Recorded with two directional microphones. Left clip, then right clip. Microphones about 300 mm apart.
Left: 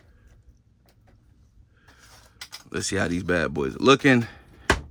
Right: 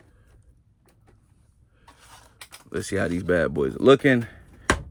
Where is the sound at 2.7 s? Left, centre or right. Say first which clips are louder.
Even; centre.